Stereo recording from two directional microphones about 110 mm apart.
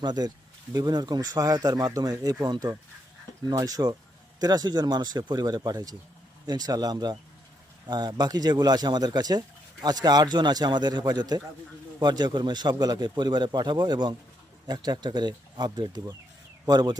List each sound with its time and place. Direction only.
0.0 s speech: 40° right (ahead or behind)